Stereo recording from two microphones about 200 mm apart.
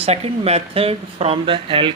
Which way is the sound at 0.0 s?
30° right (ahead or behind).